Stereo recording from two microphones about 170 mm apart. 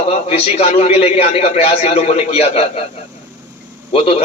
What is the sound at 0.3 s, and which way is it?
A man's voice, 40° left (ahead or behind).